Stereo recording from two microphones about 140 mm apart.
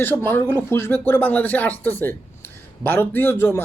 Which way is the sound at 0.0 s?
15° left (ahead or behind).